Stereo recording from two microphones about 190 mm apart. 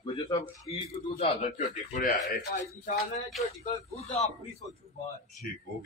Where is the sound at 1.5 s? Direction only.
45° left (ahead or behind).